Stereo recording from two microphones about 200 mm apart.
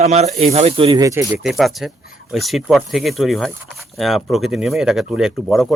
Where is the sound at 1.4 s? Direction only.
Centre (ahead or behind).